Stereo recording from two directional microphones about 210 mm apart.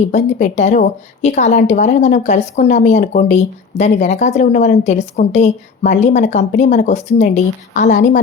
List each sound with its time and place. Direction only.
0.1 s speech: 35° left (ahead or behind)